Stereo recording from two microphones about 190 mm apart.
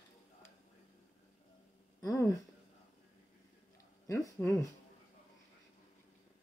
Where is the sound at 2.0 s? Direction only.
15° left (ahead or behind).